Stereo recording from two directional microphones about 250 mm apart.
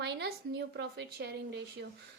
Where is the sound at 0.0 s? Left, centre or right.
Right.